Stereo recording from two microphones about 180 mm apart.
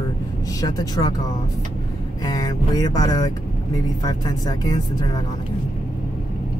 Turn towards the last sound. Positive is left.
turn(degrees=20)  # may be behind; listen again after turning